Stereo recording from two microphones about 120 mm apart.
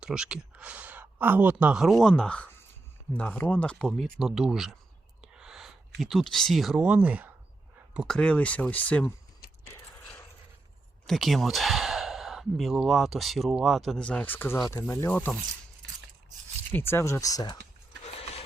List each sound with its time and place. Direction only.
0.0 s speech: 5° right (ahead or behind)
8.0 s speech: 5° left (ahead or behind)
11.0 s speech: centre (ahead or behind)
16.7 s speech: 20° left (ahead or behind)
18.0 s a sound: 55° left (ahead or behind)